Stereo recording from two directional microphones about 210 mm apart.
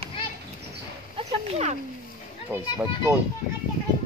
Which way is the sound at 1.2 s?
30° right (ahead or behind).